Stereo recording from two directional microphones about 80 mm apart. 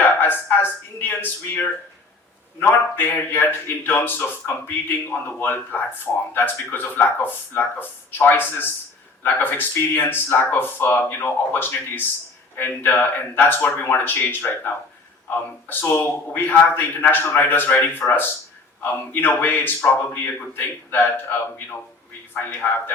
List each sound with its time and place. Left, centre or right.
0.0 s speech: left
15.6 s speech: left
18.0 s speech: centre
22.6 s speech: left